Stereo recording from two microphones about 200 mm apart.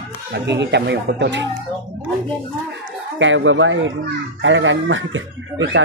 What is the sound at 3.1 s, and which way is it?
Speech, 70° right (ahead or behind).